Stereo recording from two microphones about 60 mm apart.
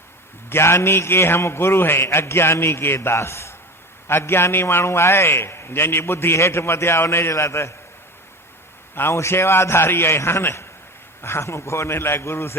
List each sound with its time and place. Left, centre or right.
0.5 s a man's voice: left
9.0 s a man's voice: left